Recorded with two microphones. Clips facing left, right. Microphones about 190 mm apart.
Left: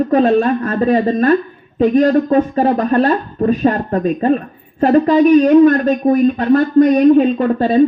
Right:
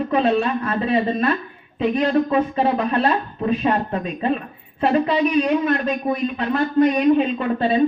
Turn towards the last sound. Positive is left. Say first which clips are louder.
# left 6 dB
turn(degrees=45)  # may be behind; listen again after turning